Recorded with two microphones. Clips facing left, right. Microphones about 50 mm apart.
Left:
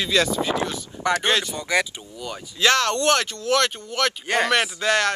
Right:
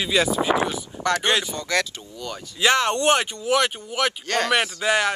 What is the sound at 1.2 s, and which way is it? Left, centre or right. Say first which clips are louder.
Speech: even; centre.